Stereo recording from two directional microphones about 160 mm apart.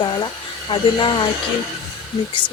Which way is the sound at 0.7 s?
30° left (ahead or behind).